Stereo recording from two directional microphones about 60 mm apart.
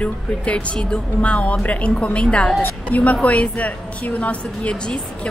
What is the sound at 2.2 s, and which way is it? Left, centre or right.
Speech, centre.